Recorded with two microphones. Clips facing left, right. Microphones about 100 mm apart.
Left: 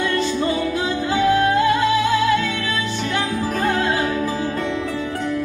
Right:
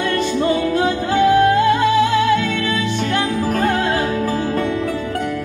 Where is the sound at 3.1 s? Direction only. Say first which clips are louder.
Right 3 dB; 55° right (ahead or behind).